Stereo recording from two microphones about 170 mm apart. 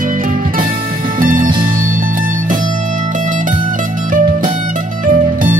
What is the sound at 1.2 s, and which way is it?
Music, 55° right (ahead or behind).